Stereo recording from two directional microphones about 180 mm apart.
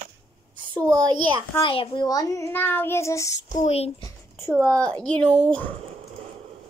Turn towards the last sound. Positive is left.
turn(degrees=5)  # may be behind; listen again after turning